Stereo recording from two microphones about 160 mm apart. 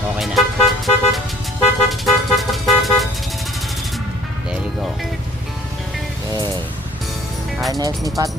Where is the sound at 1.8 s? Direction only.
Centre (ahead or behind).